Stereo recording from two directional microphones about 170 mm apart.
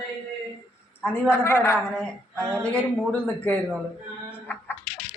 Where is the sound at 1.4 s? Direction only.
15° left (ahead or behind).